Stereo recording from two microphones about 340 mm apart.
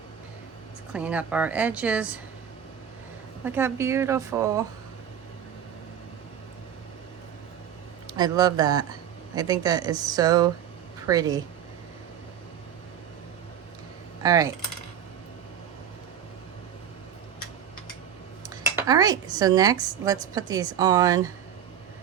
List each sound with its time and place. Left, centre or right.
0.9 s speech: centre
3.4 s speech: centre
8.0 s speech: centre
14.2 s speech: centre
18.4 s speech: centre